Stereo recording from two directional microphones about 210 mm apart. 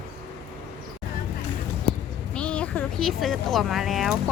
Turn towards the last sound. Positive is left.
turn(degrees=0)  # may be behind; listen again after turning